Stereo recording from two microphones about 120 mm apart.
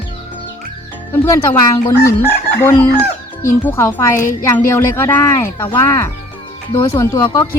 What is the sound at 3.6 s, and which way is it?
Speech, 25° left (ahead or behind).